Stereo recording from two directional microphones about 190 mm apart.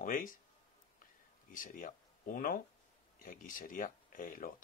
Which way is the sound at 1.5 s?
45° left (ahead or behind).